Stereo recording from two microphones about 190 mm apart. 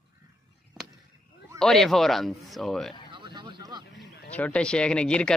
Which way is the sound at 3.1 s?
25° right (ahead or behind).